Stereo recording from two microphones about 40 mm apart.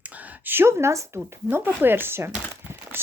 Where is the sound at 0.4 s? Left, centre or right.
Right.